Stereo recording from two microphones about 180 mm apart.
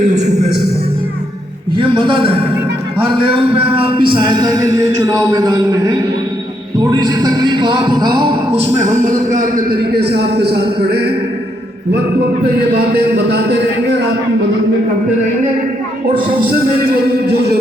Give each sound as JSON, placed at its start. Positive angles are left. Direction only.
{"t": 0.0, "sound": "a sound", "side_deg": -40}
{"t": 1.7, "sound": "a sound", "side_deg": -25}
{"t": 3.1, "sound": "a man's voice", "side_deg": -30}
{"t": 8.8, "sound": "a man's voice", "side_deg": -45}
{"t": 12.5, "sound": "a man's voice", "side_deg": -60}
{"t": 16.5, "sound": "a man's voice", "side_deg": -60}